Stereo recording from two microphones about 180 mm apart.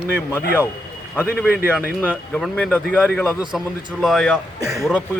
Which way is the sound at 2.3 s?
5° left (ahead or behind).